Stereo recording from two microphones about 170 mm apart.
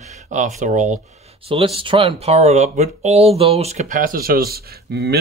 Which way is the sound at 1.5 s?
30° right (ahead or behind).